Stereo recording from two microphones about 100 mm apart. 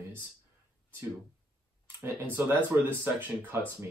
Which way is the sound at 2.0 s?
20° right (ahead or behind).